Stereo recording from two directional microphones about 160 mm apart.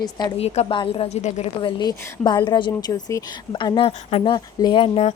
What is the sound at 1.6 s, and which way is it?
A woman's voice, 25° left (ahead or behind).